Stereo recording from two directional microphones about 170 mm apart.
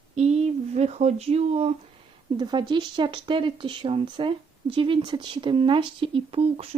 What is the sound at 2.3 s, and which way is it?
Speech, 25° right (ahead or behind).